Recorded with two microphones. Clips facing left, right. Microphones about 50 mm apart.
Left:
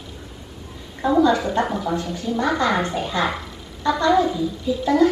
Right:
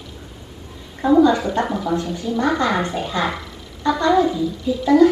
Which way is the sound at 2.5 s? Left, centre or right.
Centre.